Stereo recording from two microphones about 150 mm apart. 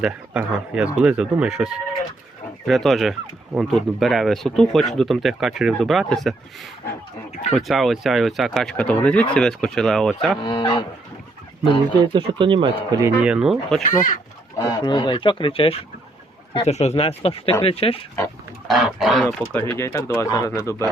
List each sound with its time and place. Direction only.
0.0 s speech: 10° right (ahead or behind)
10.4 s speech: 35° left (ahead or behind)
11.9 s speech: 35° right (ahead or behind)
13.2 s speech: 5° right (ahead or behind)
13.8 s speech: 60° left (ahead or behind)
14.8 s speech: 30° left (ahead or behind)
18.7 s speech: centre (ahead or behind)
19.5 s speech: 15° left (ahead or behind)